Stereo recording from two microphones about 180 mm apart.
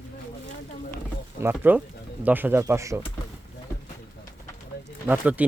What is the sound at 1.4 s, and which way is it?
Speech, 10° right (ahead or behind).